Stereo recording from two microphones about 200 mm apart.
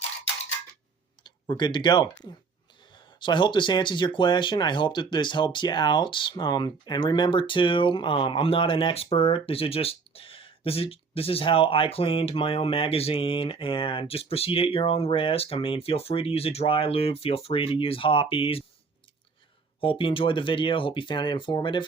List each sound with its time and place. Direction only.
1.2 s speech: 20° left (ahead or behind)
19.8 s speech: 25° left (ahead or behind)